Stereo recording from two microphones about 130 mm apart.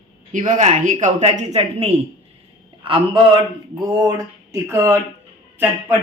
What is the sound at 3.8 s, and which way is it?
Speech, 30° right (ahead or behind).